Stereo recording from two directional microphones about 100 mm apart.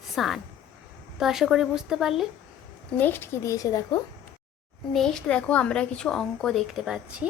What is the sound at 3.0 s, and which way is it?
Speech, 20° left (ahead or behind).